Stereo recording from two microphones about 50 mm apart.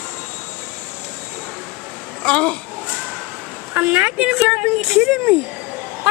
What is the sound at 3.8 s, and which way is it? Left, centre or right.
Speech, right.